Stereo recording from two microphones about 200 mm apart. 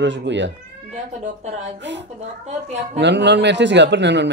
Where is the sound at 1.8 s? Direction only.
60° right (ahead or behind).